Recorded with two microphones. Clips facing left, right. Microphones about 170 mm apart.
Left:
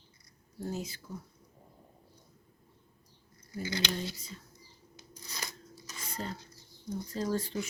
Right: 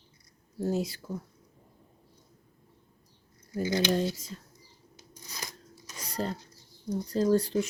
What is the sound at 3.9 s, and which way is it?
Speech, 50° right (ahead or behind).